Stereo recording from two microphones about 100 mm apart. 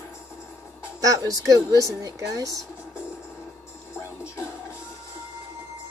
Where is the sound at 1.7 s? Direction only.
35° right (ahead or behind).